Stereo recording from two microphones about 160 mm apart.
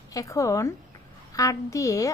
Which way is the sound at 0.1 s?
20° left (ahead or behind).